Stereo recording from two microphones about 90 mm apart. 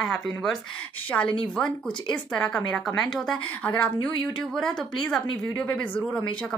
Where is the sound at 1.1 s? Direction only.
20° left (ahead or behind).